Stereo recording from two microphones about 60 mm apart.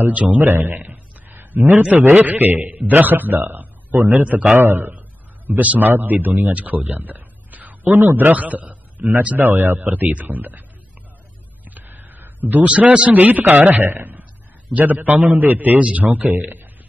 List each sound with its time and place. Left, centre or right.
0.1 s a man's voice: right
0.5 s a man's voice: right
3.4 s a sound: right
4.1 s a man's voice: right
4.6 s a man's voice: right
6.4 s a sound: right
8.2 s a man's voice: right
9.4 s a man's voice: right
11.7 s a sound: right
12.7 s a man's voice: right